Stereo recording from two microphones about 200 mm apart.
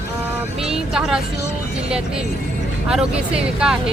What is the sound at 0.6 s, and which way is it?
Vehicle, 5° right (ahead or behind).